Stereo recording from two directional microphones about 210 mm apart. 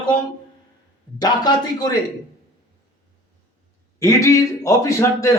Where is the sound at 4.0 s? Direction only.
15° left (ahead or behind).